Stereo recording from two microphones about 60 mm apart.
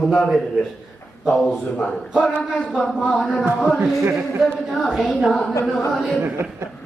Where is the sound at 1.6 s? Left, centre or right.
Centre.